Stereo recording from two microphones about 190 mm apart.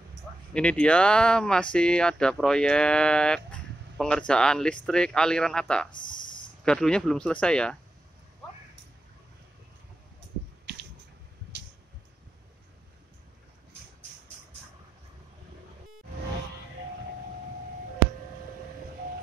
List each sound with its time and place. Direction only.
0.5 s speech: 5° left (ahead or behind)
5.9 s a sound: 25° left (ahead or behind)
6.6 s speech: 5° left (ahead or behind)